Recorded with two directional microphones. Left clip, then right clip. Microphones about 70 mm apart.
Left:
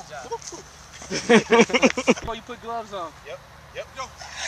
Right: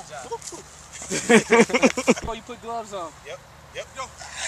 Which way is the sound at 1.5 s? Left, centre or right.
Centre.